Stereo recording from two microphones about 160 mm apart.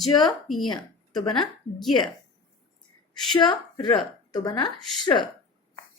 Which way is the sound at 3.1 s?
Centre (ahead or behind).